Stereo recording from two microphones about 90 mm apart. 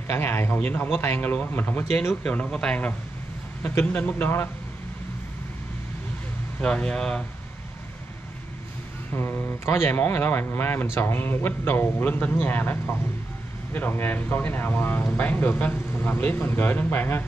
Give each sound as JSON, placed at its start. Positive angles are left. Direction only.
{"t": 0.1, "sound": "speech", "side_deg": 25}
{"t": 6.6, "sound": "speech", "side_deg": 10}
{"t": 9.1, "sound": "speech", "side_deg": 25}